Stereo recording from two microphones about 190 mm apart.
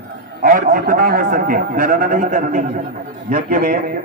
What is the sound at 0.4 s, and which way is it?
A man's voice, 45° right (ahead or behind).